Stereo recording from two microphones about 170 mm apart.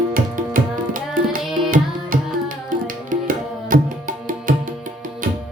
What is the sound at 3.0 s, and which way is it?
Tabla, 50° right (ahead or behind).